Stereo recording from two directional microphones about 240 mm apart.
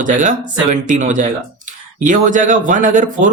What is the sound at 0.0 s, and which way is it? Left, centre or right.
Speech, right.